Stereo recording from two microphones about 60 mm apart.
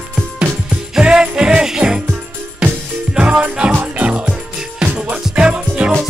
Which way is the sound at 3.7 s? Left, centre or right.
Right.